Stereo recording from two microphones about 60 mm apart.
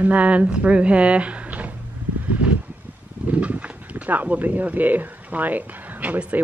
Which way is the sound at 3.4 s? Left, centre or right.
Right.